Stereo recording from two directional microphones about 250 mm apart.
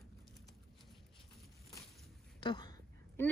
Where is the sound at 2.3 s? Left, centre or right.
Centre.